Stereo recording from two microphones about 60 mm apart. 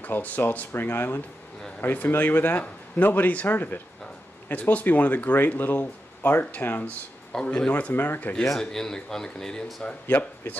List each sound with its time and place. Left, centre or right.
0.0 s speech: left
8.5 s speech: centre
10.0 s speech: left